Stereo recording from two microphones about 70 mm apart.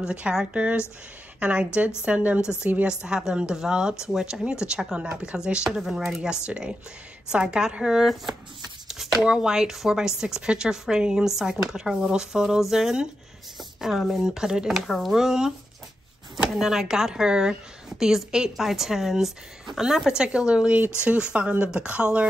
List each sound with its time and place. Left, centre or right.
0.0 s speech: centre
8.8 s shuffling cards: centre
9.2 s speech: centre